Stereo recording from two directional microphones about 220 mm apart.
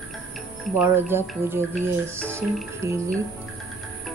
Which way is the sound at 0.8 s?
10° right (ahead or behind).